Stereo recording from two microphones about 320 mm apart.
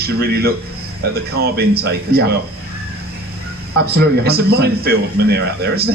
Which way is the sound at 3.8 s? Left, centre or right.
Right.